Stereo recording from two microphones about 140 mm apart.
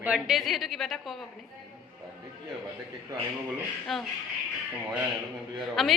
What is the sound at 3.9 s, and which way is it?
Speech, centre (ahead or behind).